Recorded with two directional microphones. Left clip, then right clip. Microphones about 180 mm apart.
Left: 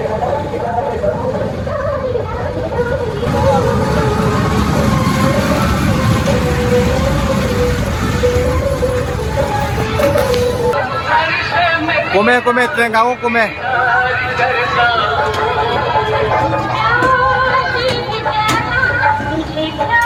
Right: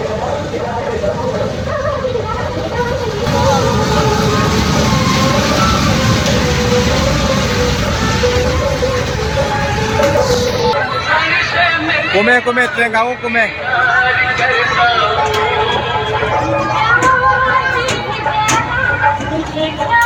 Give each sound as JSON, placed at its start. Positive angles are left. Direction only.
{"t": 11.2, "sound": "a sound", "side_deg": 50}
{"t": 12.2, "sound": "speech", "side_deg": 5}
{"t": 14.5, "sound": "vehicle", "side_deg": 55}